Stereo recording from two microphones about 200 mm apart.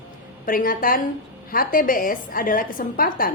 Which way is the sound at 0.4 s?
45° left (ahead or behind).